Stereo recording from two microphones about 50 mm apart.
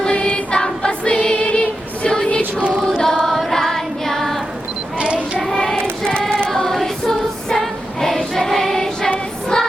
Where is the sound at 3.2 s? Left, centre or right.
Centre.